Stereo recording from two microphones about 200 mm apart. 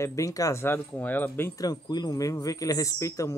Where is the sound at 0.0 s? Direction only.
15° left (ahead or behind).